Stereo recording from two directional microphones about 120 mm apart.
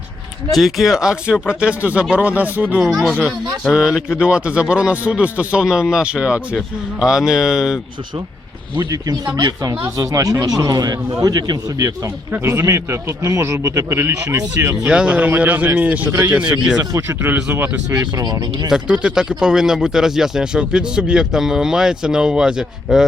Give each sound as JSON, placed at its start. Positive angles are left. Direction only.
{"t": 0.5, "sound": "speech", "side_deg": 0}
{"t": 8.7, "sound": "a man's voice", "side_deg": -35}
{"t": 14.8, "sound": "speech", "side_deg": -10}
{"t": 16.9, "sound": "a man's voice", "side_deg": -25}
{"t": 17.8, "sound": "speech", "side_deg": -35}
{"t": 18.7, "sound": "speech", "side_deg": -10}